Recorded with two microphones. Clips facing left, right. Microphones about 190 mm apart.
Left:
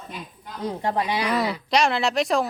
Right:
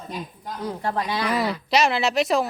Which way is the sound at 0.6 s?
20° left (ahead or behind).